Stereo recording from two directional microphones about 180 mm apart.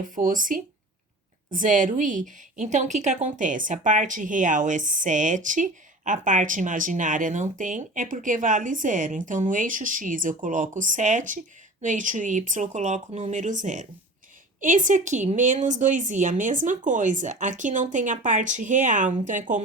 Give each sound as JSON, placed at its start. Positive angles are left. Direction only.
{"t": 0.0, "sound": "a woman's voice", "side_deg": -50}